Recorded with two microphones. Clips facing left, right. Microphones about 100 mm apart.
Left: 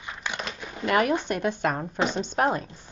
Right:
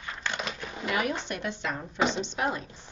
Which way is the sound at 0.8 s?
55° left (ahead or behind).